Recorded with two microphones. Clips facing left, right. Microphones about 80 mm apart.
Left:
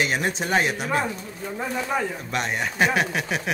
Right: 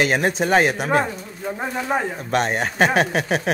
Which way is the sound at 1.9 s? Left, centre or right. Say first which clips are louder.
Right 4 dB; right.